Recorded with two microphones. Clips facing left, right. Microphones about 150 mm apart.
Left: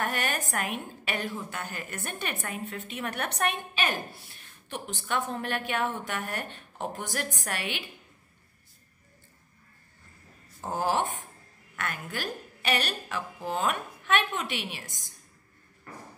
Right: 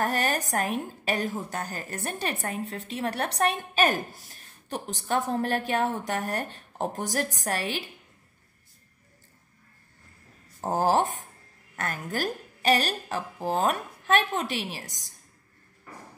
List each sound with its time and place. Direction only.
0.0 s a woman's voice: 40° right (ahead or behind)
10.6 s a woman's voice: 40° right (ahead or behind)